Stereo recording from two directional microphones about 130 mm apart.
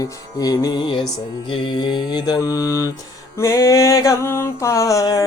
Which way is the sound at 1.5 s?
40° left (ahead or behind).